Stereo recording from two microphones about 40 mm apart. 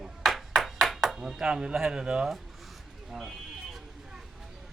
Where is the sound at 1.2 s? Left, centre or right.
Centre.